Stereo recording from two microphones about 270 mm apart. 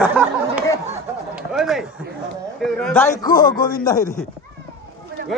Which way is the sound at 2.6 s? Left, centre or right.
Centre.